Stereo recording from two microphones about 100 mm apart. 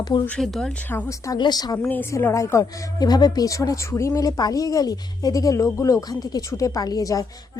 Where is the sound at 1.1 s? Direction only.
30° left (ahead or behind).